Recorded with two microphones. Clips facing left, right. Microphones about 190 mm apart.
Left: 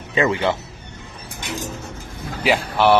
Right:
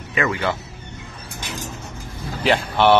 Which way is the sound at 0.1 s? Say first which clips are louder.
Left 3 dB; 25° left (ahead or behind).